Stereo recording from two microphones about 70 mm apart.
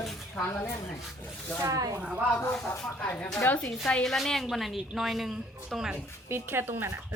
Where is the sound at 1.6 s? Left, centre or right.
Right.